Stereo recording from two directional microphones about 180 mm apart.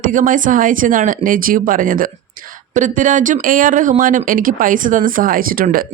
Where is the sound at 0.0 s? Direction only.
45° right (ahead or behind).